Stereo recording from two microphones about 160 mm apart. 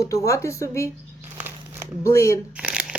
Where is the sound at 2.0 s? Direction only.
20° left (ahead or behind).